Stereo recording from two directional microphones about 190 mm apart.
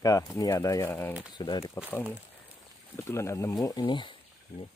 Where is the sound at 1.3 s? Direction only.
20° left (ahead or behind).